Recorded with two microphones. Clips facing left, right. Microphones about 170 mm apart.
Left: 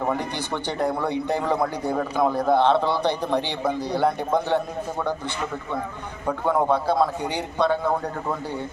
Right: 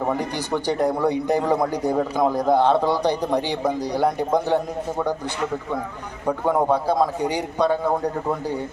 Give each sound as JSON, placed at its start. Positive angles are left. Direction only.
{"t": 0.7, "sound": "a man's voice", "side_deg": -15}
{"t": 6.2, "sound": "a man's voice", "side_deg": -15}